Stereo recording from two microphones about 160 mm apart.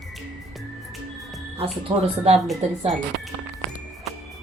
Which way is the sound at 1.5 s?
40° right (ahead or behind).